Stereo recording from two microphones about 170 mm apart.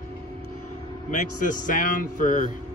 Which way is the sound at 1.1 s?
50° left (ahead or behind).